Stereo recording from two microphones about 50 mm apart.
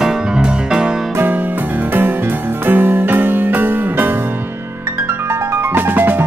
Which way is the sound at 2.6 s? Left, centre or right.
Right.